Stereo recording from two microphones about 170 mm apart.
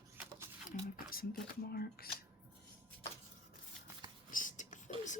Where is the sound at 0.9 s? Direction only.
60° left (ahead or behind).